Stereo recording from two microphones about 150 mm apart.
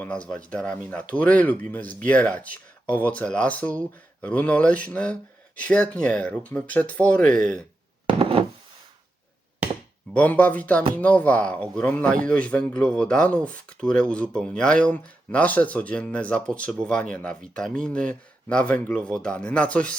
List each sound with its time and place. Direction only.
0.0 s speech: 10° left (ahead or behind)
8.2 s a sound: 35° right (ahead or behind)
10.2 s speech: 10° left (ahead or behind)